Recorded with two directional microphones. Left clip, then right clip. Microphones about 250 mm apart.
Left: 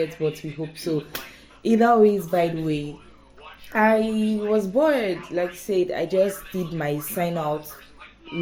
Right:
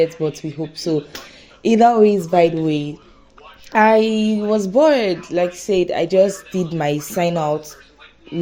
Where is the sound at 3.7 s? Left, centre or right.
Right.